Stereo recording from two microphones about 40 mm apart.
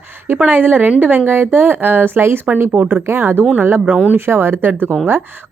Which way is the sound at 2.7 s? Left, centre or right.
Right.